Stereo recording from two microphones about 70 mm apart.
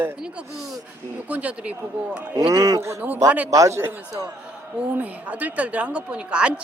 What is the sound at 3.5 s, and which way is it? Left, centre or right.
Speech, right.